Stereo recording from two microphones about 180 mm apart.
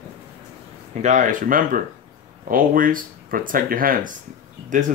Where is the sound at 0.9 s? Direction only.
40° right (ahead or behind).